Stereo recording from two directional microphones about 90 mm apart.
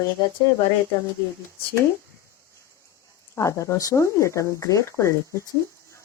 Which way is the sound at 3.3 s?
35° left (ahead or behind).